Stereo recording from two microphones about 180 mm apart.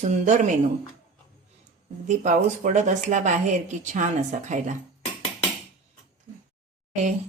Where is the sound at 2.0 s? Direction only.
45° right (ahead or behind).